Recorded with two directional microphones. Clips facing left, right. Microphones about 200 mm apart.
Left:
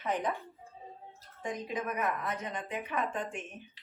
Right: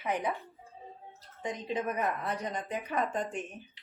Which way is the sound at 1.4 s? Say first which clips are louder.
Right 2 dB; 20° right (ahead or behind).